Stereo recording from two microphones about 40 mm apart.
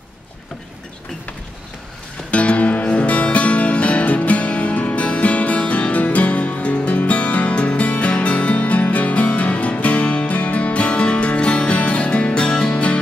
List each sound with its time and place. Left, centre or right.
2.3 s music: left